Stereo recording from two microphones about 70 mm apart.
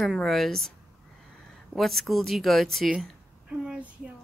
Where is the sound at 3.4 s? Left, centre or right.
Centre.